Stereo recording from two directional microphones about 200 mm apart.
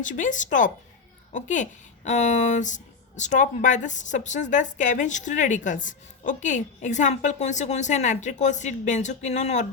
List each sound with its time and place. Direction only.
0.0 s speech: 40° left (ahead or behind)